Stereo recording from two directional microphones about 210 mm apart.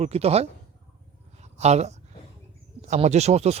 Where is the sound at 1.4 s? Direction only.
30° right (ahead or behind).